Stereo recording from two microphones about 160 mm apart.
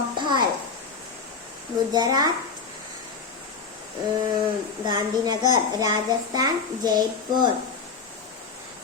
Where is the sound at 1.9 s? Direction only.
25° right (ahead or behind).